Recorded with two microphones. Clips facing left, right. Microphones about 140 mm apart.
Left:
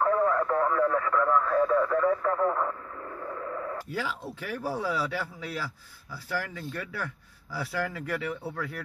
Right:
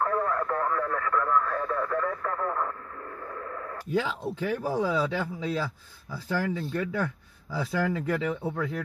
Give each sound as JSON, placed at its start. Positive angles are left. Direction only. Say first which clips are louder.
{"t": 0.2, "sound": "speech", "louder": "left 3 dB", "side_deg": 20}
{"t": 3.3, "sound": "radio", "louder": "left 4 dB", "side_deg": 20}
{"t": 3.9, "sound": "speech", "louder": "right 5 dB", "side_deg": -20}